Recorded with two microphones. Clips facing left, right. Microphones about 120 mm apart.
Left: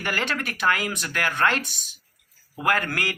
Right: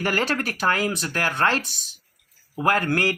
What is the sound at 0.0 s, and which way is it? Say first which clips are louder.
Speech: right 4 dB; 40° right (ahead or behind).